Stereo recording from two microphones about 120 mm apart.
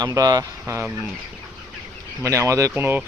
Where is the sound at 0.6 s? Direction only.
20° right (ahead or behind).